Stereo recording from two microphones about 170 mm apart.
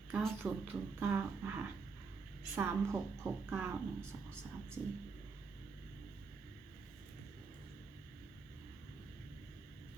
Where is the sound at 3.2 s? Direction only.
15° right (ahead or behind).